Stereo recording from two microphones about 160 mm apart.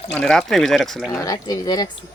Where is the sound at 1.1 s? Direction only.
20° left (ahead or behind).